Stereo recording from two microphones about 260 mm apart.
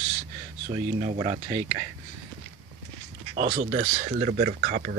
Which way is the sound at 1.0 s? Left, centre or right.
Right.